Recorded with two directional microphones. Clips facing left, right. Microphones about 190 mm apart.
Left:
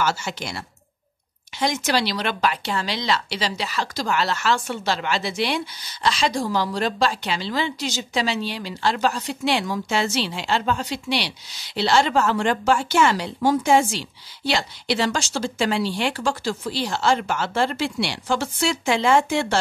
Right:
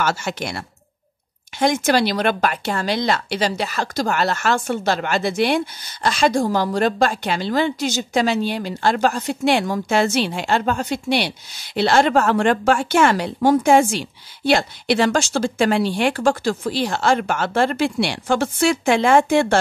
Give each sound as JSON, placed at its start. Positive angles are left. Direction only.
{"t": 0.0, "sound": "speech", "side_deg": -55}